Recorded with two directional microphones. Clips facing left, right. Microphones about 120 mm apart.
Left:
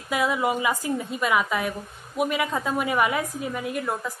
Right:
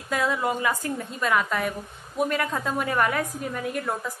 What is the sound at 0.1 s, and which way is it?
A woman's voice, 10° left (ahead or behind).